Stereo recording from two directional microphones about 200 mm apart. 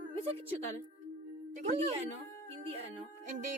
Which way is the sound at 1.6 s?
35° right (ahead or behind).